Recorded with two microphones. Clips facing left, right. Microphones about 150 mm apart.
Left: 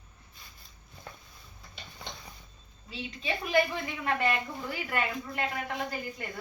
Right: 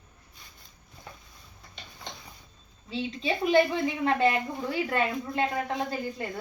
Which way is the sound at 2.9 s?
30° right (ahead or behind).